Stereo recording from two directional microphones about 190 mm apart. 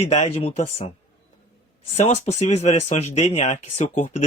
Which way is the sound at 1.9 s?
35° left (ahead or behind).